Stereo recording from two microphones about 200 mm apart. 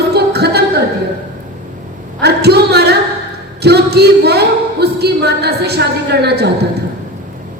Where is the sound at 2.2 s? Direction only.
55° right (ahead or behind).